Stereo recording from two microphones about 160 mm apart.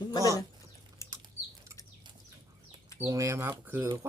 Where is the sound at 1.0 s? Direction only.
20° left (ahead or behind).